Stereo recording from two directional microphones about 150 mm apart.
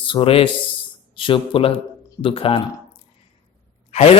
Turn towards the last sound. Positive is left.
turn(degrees=45)  # may be behind; listen again after turning